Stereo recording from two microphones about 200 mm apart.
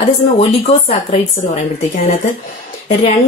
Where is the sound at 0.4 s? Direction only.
30° left (ahead or behind).